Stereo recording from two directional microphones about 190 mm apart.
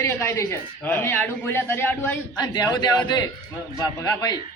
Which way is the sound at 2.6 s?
20° left (ahead or behind).